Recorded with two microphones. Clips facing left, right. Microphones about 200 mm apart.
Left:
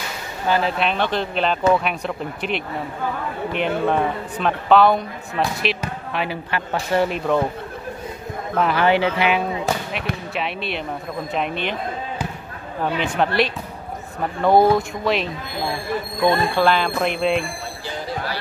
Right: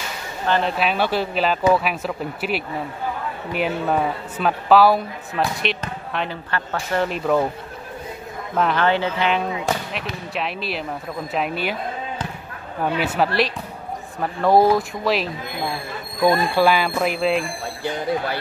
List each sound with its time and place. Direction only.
0.5 s speech: centre (ahead or behind)
7.1 s speech: centre (ahead or behind)
8.5 s speech: centre (ahead or behind)
8.8 s speech: 15° left (ahead or behind)
10.3 s speech: centre (ahead or behind)
12.8 s speech: 5° right (ahead or behind)
17.8 s speech: 55° right (ahead or behind)